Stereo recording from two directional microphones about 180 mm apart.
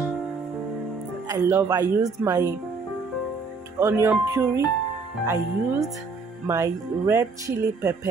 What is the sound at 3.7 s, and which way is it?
Speech, 15° right (ahead or behind).